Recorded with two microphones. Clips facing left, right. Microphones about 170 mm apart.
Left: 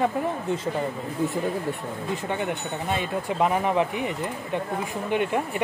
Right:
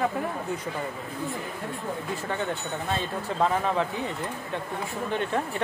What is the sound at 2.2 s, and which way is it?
Speech, 15° left (ahead or behind).